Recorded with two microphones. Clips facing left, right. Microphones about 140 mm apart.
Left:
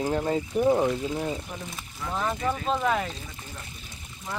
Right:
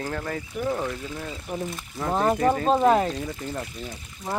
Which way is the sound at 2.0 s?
45° right (ahead or behind).